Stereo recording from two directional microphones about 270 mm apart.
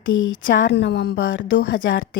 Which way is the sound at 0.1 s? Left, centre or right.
Left.